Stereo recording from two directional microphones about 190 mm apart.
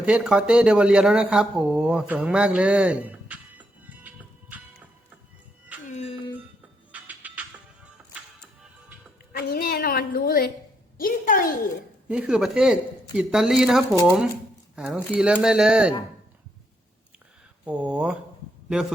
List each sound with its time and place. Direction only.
0.0 s speech: 5° right (ahead or behind)
5.9 s music: 35° left (ahead or behind)
6.9 s music: 10° right (ahead or behind)
9.3 s a sound: 50° left (ahead or behind)
11.0 s a woman's voice: 45° left (ahead or behind)
12.0 s speech: 5° right (ahead or behind)
17.7 s speech: 5° right (ahead or behind)